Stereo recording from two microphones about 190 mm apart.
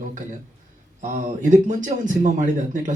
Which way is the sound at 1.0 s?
40° right (ahead or behind).